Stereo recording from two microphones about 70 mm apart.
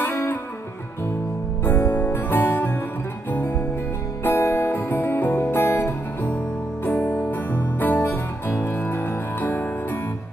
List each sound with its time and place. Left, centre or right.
0.0 s music: left
1.6 s music: left